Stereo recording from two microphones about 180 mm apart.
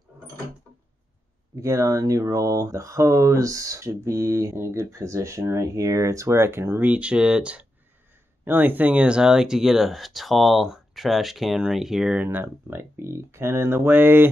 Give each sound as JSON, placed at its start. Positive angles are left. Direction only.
{"t": 1.5, "sound": "speech", "side_deg": -15}